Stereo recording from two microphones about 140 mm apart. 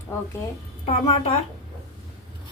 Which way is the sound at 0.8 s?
40° left (ahead or behind).